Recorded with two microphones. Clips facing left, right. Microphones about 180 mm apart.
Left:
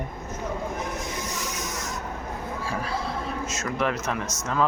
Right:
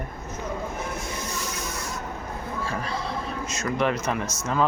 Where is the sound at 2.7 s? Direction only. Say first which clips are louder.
Left 2 dB; 5° left (ahead or behind).